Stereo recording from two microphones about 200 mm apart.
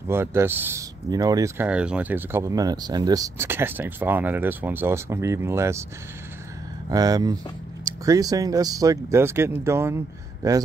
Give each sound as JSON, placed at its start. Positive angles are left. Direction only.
{"t": 0.1, "sound": "speech", "side_deg": -10}
{"t": 6.9, "sound": "speech", "side_deg": -20}